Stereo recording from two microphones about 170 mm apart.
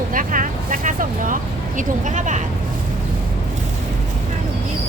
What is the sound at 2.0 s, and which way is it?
Speech, 50° right (ahead or behind).